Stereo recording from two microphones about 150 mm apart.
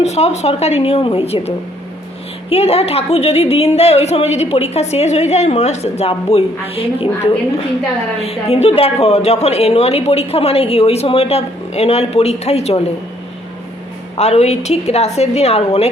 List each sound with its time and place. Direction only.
0.0 s a woman's voice: 50° left (ahead or behind)
8.2 s a woman's voice: 40° left (ahead or behind)
14.2 s a woman's voice: 45° left (ahead or behind)